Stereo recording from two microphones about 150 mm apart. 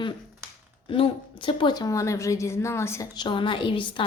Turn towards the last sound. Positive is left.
turn(degrees=35)  # may be behind; listen again after turning